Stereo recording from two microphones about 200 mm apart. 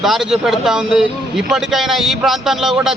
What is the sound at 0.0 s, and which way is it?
A man's voice, centre (ahead or behind).